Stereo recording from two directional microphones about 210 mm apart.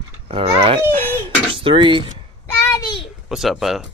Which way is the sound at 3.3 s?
Centre (ahead or behind).